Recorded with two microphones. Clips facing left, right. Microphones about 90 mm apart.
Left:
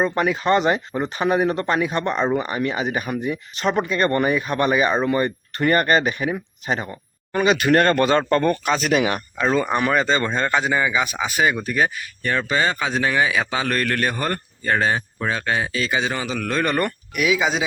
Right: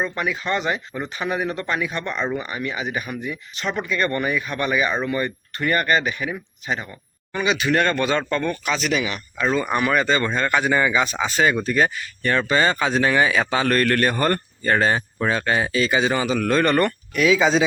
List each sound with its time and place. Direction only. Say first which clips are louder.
0.0 s speech: left 5 dB; 40° left (ahead or behind)
2.0 s speech: left 4 dB; 20° left (ahead or behind)
2.3 s speech: left 5 dB; 40° left (ahead or behind); by 9.2 s 55° left (ahead or behind)
9.6 s speech: even; 30° left (ahead or behind)
10.8 s speech: right 1 dB; 10° left (ahead or behind)